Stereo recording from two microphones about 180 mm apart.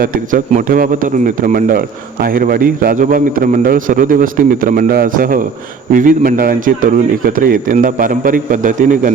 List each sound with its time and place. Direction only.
0.0 s a man's voice: 50° right (ahead or behind)